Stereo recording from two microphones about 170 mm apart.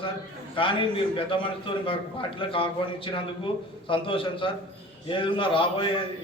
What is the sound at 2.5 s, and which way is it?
A man's voice, 30° left (ahead or behind).